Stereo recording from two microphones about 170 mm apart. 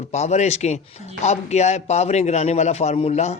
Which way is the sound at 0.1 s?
40° left (ahead or behind).